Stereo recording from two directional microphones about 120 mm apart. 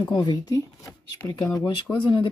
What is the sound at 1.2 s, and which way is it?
Speech, 25° left (ahead or behind).